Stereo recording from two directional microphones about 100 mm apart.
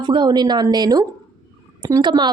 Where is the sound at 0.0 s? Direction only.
50° right (ahead or behind).